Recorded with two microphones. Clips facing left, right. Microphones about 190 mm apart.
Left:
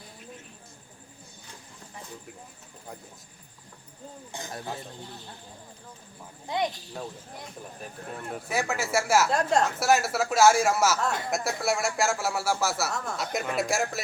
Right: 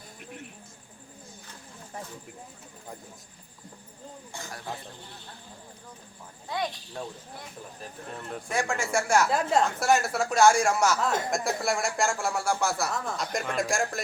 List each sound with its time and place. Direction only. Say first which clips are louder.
4.3 s speech: left 4 dB; 20° left (ahead or behind)
8.1 s speech: even; 5° left (ahead or behind)